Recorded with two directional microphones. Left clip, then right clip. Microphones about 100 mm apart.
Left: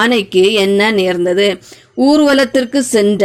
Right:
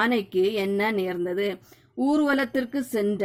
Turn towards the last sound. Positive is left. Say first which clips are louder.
# left 14 dB
turn(degrees=10)  # may be behind; listen again after turning